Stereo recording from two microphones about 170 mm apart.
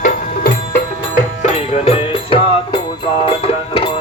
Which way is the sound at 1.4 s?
40° left (ahead or behind).